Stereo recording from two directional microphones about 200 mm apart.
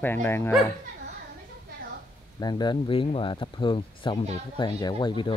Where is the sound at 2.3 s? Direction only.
20° left (ahead or behind).